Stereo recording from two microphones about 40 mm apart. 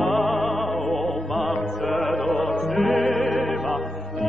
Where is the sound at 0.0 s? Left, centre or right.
Centre.